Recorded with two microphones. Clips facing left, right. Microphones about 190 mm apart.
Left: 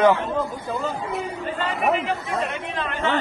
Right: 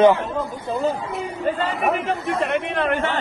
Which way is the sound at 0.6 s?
35° right (ahead or behind).